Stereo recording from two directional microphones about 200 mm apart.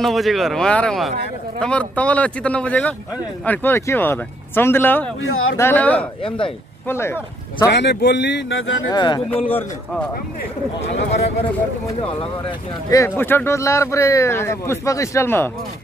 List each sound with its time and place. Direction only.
0.0 s speech: centre (ahead or behind)
5.2 s speech: 90° left
5.6 s speech: 10° left (ahead or behind)
6.2 s speech: 25° left (ahead or behind)
6.9 s speech: 10° left (ahead or behind)
7.7 s speech: 60° left (ahead or behind)
8.9 s speech: 20° left (ahead or behind)
9.3 s speech: 10° left (ahead or behind)
12.0 s speech: 25° left (ahead or behind); by 15.5 s 10° left (ahead or behind)